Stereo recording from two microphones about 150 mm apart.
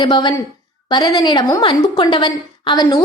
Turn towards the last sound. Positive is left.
turn(degrees=25)  # may be behind; listen again after turning